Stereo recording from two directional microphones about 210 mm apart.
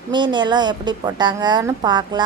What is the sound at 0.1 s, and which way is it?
A woman's voice, 20° right (ahead or behind).